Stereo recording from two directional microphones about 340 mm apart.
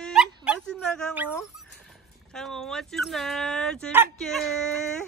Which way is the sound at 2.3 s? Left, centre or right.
Centre.